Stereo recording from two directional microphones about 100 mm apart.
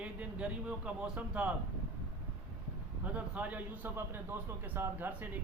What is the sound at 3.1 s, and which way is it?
A man's voice, 15° right (ahead or behind).